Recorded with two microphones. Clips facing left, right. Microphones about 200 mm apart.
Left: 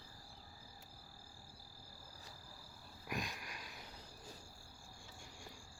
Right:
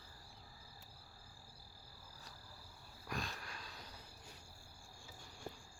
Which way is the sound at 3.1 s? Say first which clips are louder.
Left 1 dB; 15° left (ahead or behind).